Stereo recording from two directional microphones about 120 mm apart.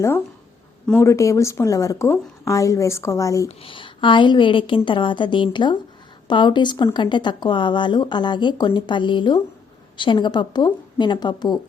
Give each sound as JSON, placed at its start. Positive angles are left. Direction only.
{"t": 0.9, "sound": "speech", "side_deg": 25}
{"t": 3.6, "sound": "a woman's voice", "side_deg": 45}